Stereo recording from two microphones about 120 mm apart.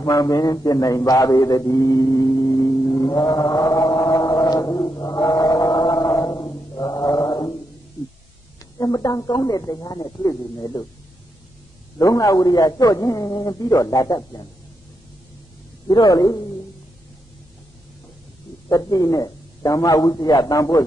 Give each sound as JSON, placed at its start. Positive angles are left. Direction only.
{"t": 0.0, "sound": "a sound", "side_deg": 30}
{"t": 8.5, "sound": "a man's voice", "side_deg": 30}
{"t": 12.0, "sound": "a man's voice", "side_deg": 30}
{"t": 15.9, "sound": "a man's voice", "side_deg": 30}
{"t": 18.7, "sound": "a man's voice", "side_deg": 30}